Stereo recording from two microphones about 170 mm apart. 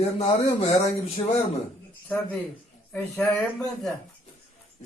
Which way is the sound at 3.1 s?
5° left (ahead or behind).